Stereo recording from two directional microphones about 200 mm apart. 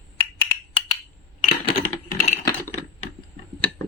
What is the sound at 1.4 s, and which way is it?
Coin, 40° left (ahead or behind).